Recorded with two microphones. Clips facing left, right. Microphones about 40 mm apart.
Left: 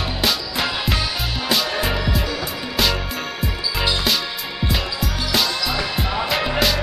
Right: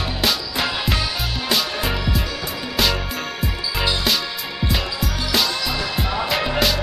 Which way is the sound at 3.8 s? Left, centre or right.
Centre.